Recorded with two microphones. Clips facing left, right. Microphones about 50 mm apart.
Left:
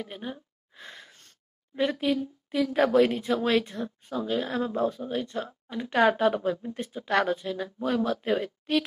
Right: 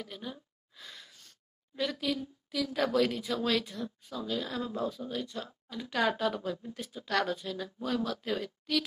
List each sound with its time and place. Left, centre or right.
0.0 s gasp: left
1.8 s a woman's voice: left